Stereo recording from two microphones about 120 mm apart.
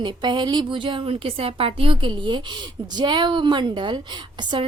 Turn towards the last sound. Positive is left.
turn(degrees=-40)  # may be behind; listen again after turning